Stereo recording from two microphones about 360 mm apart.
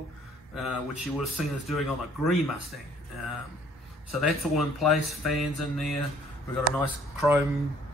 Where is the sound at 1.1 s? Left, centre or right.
Centre.